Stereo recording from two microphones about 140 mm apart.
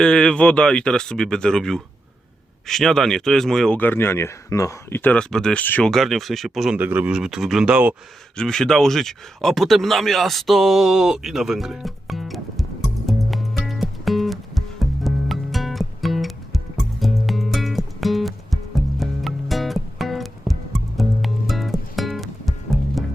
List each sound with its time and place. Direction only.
0.0 s speech: 5° left (ahead or behind)
6.7 s speech: 15° right (ahead or behind)
8.4 s speech: 5° left (ahead or behind)
13.1 s music: centre (ahead or behind)